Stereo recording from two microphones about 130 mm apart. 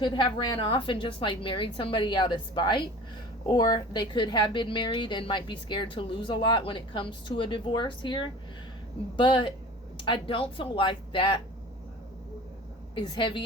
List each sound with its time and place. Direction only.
0.0 s a woman's voice: 35° left (ahead or behind)
12.9 s a woman's voice: 40° left (ahead or behind)